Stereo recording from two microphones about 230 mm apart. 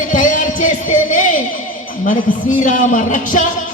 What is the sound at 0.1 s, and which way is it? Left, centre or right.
Music, left.